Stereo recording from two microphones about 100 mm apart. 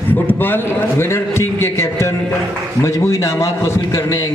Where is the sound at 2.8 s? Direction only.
30° left (ahead or behind).